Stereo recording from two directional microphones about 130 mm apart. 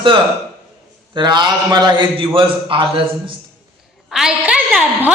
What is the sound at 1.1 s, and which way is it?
A man's voice, 35° right (ahead or behind).